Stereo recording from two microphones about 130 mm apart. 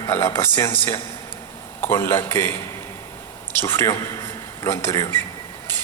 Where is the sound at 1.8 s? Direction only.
20° left (ahead or behind).